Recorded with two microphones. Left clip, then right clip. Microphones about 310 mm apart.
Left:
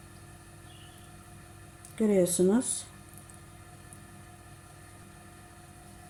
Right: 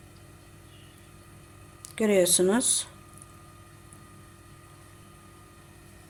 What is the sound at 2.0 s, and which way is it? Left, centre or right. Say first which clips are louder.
Speech: right 3 dB; right.